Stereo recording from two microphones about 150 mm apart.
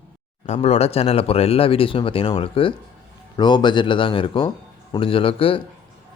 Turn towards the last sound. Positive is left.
turn(degrees=35)  # may be behind; listen again after turning